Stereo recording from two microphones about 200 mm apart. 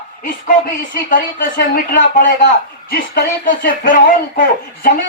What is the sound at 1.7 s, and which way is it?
Speech, 55° left (ahead or behind).